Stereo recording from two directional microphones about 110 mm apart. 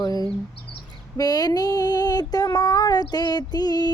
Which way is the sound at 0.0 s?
35° left (ahead or behind).